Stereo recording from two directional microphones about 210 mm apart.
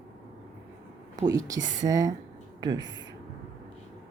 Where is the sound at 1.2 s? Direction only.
15° right (ahead or behind).